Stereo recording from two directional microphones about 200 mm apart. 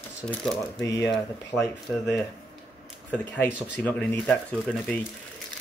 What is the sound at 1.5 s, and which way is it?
Speech, 15° left (ahead or behind).